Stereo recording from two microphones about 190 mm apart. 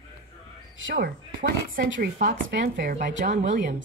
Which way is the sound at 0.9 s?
55° right (ahead or behind).